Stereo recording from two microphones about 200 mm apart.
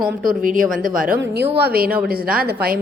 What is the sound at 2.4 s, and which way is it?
Speech, 45° right (ahead or behind).